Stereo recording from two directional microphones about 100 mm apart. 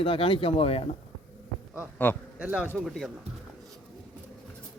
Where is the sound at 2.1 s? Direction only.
20° left (ahead or behind).